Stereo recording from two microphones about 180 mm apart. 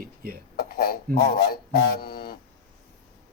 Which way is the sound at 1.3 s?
55° left (ahead or behind).